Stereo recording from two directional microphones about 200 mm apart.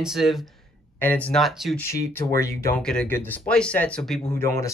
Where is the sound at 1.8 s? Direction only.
15° left (ahead or behind).